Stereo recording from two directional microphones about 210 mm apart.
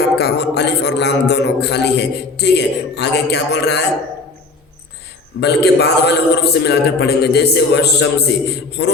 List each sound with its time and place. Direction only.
0.2 s speech: 50° left (ahead or behind)
5.4 s speech: 50° left (ahead or behind)